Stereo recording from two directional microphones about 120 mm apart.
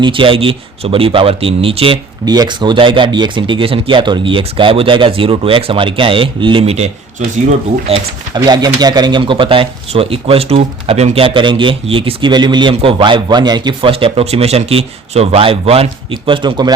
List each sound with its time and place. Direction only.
0.0 s speech: 45° right (ahead or behind)
2.2 s speech: 35° right (ahead or behind)
7.9 s speech: 55° right (ahead or behind)
8.3 s speech: 35° right (ahead or behind)
13.9 s speech: 50° right (ahead or behind); by 16.7 s 35° right (ahead or behind)